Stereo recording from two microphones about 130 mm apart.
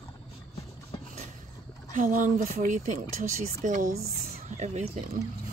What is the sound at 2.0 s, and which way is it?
Speech, 90° right.